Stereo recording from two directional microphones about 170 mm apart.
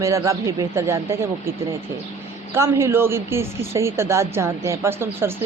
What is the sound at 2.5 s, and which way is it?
A woman's voice, 15° right (ahead or behind).